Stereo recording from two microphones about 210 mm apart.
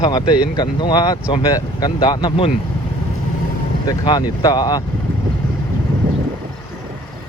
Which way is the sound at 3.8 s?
20° left (ahead or behind).